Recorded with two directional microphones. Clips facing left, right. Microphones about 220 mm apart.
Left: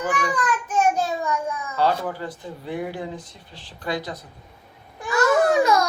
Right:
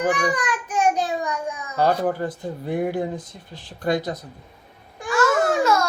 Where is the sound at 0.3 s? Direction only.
15° right (ahead or behind).